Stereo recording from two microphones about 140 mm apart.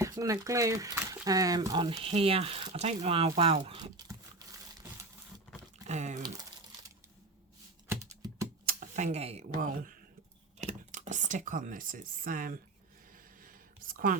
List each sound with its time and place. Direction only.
0.0 s speech: 25° right (ahead or behind)
2.0 s speech: 45° right (ahead or behind)
3.9 s a sound: 30° right (ahead or behind)
5.9 s speech: 55° right (ahead or behind)
7.9 s typing: 20° right (ahead or behind)
8.6 s a sound: 65° right (ahead or behind); by 9.5 s 45° right (ahead or behind)
9.6 s speech: 70° right (ahead or behind)
10.6 s speech: 60° right (ahead or behind); by 12.5 s 75° right (ahead or behind)
13.4 s a sound: 85° right